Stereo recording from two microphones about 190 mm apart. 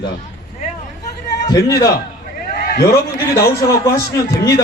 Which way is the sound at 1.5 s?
20° left (ahead or behind).